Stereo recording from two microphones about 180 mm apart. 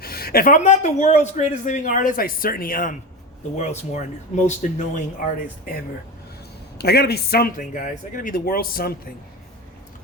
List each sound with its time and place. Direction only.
0.0 s a man's voice: 60° left (ahead or behind)
3.6 s a man's voice: 40° left (ahead or behind)
6.7 s a man's voice: 65° left (ahead or behind)